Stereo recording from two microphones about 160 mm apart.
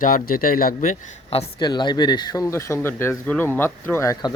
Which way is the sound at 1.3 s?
40° left (ahead or behind).